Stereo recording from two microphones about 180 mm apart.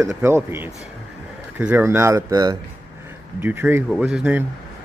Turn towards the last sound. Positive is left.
turn(degrees=-10)  # may be behind; listen again after turning